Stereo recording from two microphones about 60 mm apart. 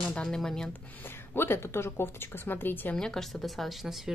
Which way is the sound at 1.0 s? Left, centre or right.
Left.